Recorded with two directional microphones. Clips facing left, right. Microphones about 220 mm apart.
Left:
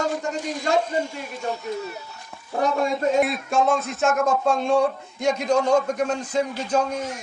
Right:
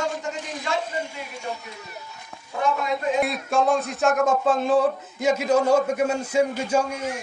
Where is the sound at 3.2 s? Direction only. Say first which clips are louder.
Left 1 dB; centre (ahead or behind).